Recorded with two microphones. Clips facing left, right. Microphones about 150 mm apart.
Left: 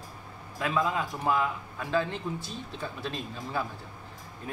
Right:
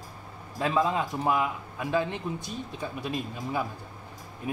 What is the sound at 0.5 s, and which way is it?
A man's voice, 30° right (ahead or behind).